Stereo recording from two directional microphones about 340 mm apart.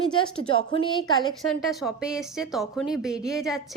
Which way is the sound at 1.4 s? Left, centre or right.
Centre.